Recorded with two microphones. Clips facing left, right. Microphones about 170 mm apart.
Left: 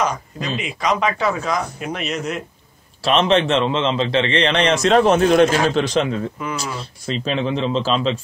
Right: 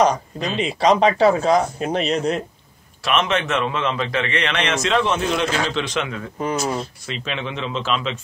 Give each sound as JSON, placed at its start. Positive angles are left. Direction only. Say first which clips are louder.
{"t": 0.0, "sound": "speech", "louder": "right 4 dB", "side_deg": -30}
{"t": 3.0, "sound": "a man's voice", "louder": "left 5 dB", "side_deg": 30}